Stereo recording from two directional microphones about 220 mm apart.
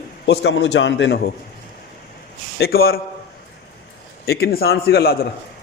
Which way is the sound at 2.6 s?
45° left (ahead or behind).